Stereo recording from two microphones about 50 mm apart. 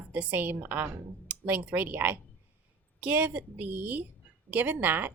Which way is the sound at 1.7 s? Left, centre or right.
Right.